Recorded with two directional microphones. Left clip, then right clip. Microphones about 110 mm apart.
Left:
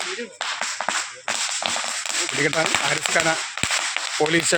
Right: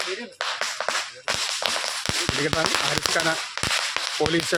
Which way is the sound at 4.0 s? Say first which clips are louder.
Left 1 dB; 30° right (ahead or behind).